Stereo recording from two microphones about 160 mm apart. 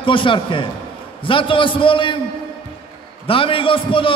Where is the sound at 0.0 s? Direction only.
30° left (ahead or behind).